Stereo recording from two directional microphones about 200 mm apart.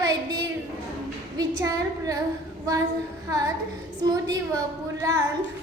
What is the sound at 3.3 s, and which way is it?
A woman's voice, 15° right (ahead or behind).